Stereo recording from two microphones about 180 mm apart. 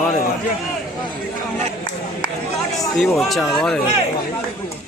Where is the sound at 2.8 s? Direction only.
Centre (ahead or behind).